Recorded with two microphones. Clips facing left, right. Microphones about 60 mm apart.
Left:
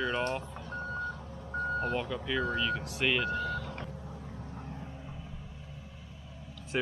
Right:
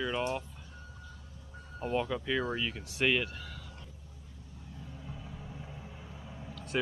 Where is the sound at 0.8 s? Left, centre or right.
Left.